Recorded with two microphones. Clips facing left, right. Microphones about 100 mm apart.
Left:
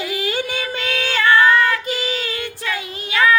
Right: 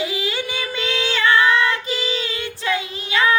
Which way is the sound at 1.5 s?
25° right (ahead or behind).